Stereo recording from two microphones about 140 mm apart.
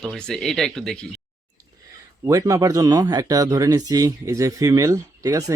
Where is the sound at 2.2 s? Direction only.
25° right (ahead or behind).